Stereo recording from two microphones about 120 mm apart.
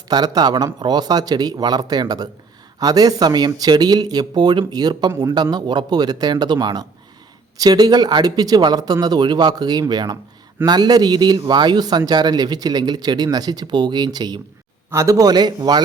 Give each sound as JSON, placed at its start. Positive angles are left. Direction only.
{"t": 0.1, "sound": "a man's voice", "side_deg": -35}